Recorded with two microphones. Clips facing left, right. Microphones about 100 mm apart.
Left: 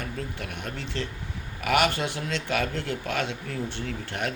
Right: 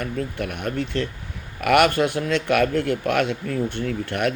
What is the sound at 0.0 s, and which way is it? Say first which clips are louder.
Speech: right 7 dB; 55° right (ahead or behind).